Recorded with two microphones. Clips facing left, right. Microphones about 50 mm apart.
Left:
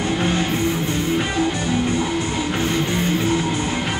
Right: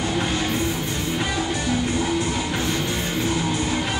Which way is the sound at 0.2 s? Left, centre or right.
Left.